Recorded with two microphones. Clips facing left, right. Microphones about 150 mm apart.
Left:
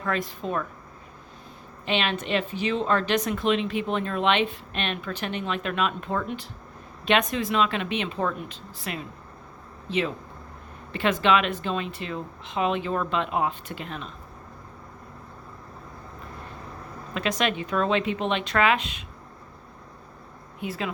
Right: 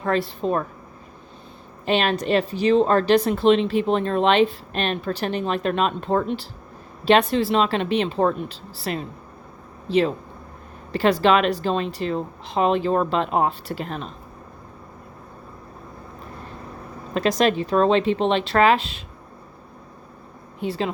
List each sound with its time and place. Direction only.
0.0 s a woman's voice: 30° right (ahead or behind)
1.8 s a woman's voice: 40° right (ahead or behind)
17.2 s a woman's voice: 35° right (ahead or behind)
20.6 s a woman's voice: 30° right (ahead or behind)